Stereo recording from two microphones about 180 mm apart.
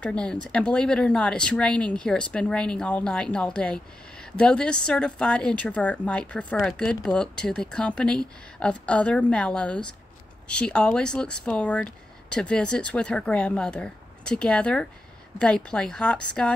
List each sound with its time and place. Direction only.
0.0 s speech: 5° left (ahead or behind)